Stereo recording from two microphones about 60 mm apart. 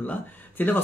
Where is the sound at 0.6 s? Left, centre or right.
Left.